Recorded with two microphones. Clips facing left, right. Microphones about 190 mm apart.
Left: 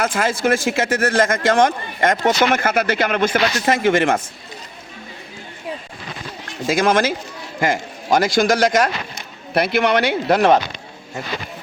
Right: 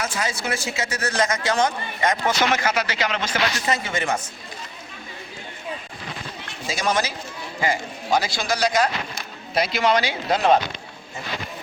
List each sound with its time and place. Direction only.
0.0 s speech: 55° left (ahead or behind)
6.7 s a man's voice: 55° left (ahead or behind)
9.6 s speech: 60° left (ahead or behind)